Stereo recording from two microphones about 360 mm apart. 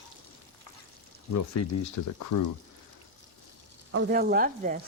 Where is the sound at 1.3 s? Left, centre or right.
Left.